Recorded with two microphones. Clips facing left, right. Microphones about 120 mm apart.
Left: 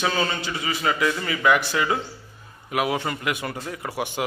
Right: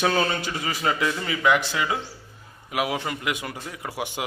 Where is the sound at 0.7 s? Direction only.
30° right (ahead or behind).